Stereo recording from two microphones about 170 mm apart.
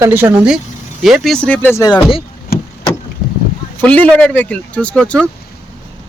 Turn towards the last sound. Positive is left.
turn(degrees=5)  # may be behind; listen again after turning